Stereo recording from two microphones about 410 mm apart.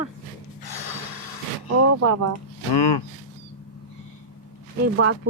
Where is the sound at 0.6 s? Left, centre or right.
Left.